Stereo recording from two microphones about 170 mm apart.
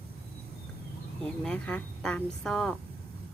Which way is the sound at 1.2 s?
5° left (ahead or behind).